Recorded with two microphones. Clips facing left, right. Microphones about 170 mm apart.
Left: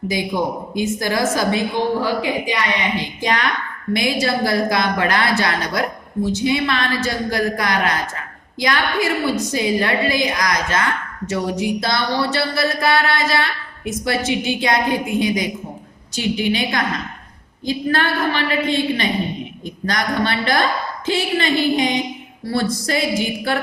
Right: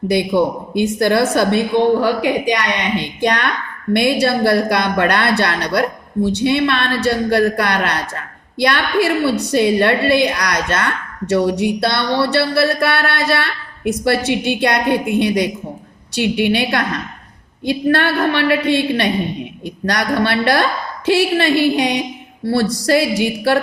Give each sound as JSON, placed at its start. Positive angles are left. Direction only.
{"t": 0.1, "sound": "a woman's voice", "side_deg": -65}